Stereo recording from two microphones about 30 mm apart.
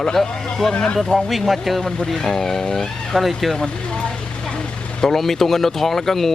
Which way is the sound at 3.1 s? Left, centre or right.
Centre.